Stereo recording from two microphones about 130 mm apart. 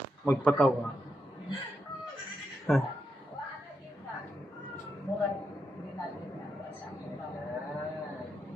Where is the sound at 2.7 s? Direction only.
Centre (ahead or behind).